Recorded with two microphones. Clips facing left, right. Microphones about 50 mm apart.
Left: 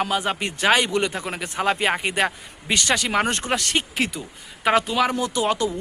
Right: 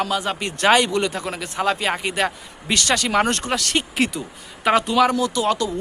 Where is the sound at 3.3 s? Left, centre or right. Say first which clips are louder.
Even; left.